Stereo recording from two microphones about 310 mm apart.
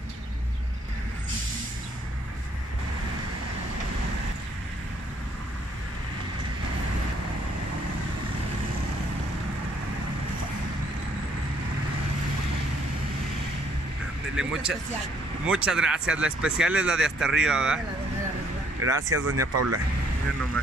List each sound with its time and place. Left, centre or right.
14.3 s speech: centre
18.8 s speech: right